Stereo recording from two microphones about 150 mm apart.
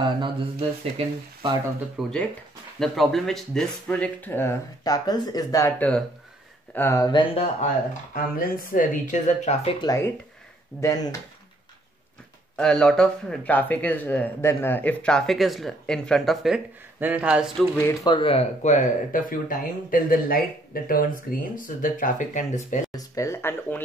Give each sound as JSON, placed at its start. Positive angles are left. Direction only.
{"t": 0.0, "sound": "speech", "side_deg": -35}
{"t": 2.0, "sound": "speech", "side_deg": 5}
{"t": 5.8, "sound": "speech", "side_deg": 5}
{"t": 7.1, "sound": "speech", "side_deg": 35}
{"t": 8.1, "sound": "speech", "side_deg": 75}
{"t": 9.7, "sound": "speech", "side_deg": 30}
{"t": 10.8, "sound": "speech", "side_deg": 20}
{"t": 12.5, "sound": "speech", "side_deg": 5}
{"t": 17.6, "sound": "speech", "side_deg": 10}
{"t": 18.0, "sound": "speech", "side_deg": 35}
{"t": 22.8, "sound": "speech", "side_deg": 20}